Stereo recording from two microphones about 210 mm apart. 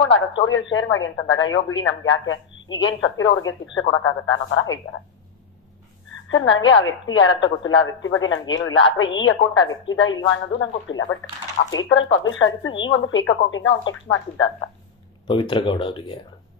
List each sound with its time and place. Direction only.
0.5 s speech: 65° left (ahead or behind)
6.2 s speech: 65° left (ahead or behind)
15.2 s speech: 20° left (ahead or behind)